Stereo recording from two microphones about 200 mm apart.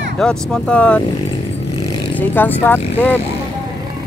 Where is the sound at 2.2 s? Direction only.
10° left (ahead or behind).